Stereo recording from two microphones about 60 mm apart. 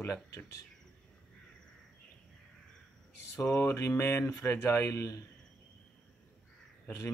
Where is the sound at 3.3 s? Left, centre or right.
Left.